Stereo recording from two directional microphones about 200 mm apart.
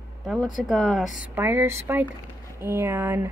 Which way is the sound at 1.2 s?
10° right (ahead or behind).